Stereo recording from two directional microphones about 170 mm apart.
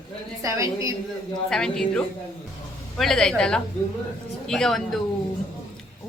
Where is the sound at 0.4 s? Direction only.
20° right (ahead or behind).